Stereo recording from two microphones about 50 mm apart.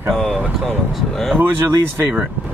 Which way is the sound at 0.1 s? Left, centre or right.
Centre.